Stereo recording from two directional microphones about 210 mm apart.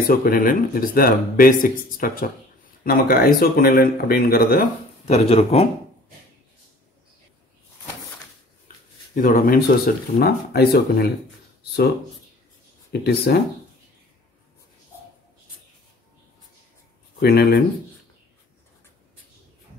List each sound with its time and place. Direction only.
0.1 s speech: 45° left (ahead or behind)
5.0 s speech: 30° left (ahead or behind)
9.1 s speech: 40° left (ahead or behind)
13.0 s speech: 50° left (ahead or behind)
17.2 s speech: 45° left (ahead or behind)